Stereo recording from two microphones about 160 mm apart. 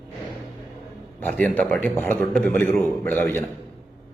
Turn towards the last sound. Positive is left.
turn(degrees=15)  # may be behind; listen again after turning